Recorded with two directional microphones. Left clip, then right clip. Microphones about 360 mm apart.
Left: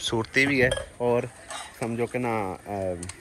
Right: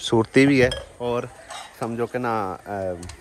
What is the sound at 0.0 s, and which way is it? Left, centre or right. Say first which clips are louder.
Cutlery: right 5 dB; centre.